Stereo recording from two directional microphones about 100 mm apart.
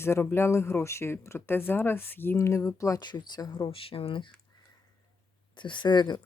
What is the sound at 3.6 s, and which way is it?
Speech, 65° left (ahead or behind).